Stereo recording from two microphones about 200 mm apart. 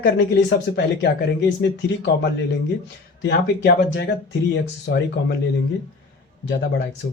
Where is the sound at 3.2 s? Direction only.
60° left (ahead or behind).